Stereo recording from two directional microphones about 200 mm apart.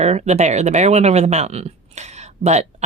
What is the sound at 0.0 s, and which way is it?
Speech, 35° right (ahead or behind).